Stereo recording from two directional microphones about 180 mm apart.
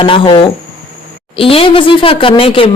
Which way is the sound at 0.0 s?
30° left (ahead or behind).